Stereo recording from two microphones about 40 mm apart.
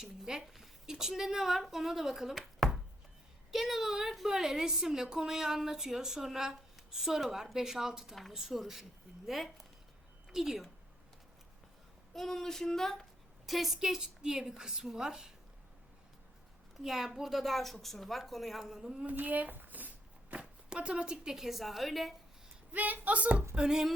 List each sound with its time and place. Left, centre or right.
0.0 s a woman's voice: centre
2.6 s chopping: centre
3.5 s a woman's voice: centre
12.1 s a sound: centre
13.5 s a woman's voice: centre
16.8 s a woman's voice: centre
18.6 s a woman's voice: centre
19.1 s speech: right
20.3 s speech: right
21.3 s speech: centre
22.7 s speech: right
23.6 s a woman's voice: centre